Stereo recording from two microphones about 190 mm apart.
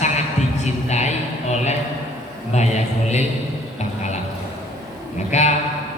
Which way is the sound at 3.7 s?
35° left (ahead or behind).